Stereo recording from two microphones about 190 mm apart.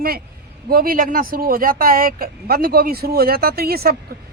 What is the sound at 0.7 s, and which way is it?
Speech, 50° right (ahead or behind).